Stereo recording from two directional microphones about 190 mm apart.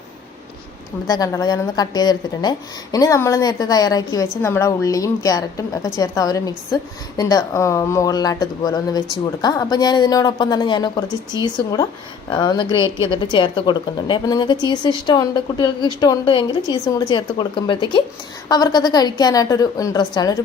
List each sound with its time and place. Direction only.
1.0 s a woman's voice: 20° left (ahead or behind)